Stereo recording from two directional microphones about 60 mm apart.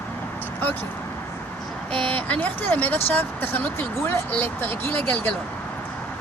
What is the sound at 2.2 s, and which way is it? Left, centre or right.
Speech, left.